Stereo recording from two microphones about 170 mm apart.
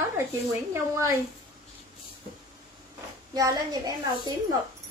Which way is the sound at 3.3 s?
20° right (ahead or behind).